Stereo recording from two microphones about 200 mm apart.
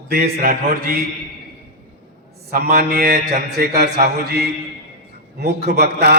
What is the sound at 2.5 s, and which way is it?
A man's voice, 50° right (ahead or behind).